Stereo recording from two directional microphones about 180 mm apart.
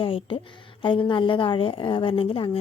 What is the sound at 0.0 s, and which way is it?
A woman's voice, 30° left (ahead or behind).